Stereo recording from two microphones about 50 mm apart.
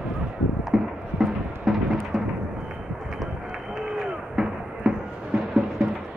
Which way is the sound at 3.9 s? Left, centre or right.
Centre.